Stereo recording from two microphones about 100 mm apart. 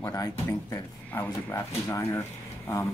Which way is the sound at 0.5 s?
20° left (ahead or behind).